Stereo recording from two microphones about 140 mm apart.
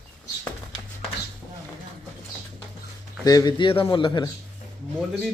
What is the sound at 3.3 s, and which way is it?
A man's voice, 25° left (ahead or behind).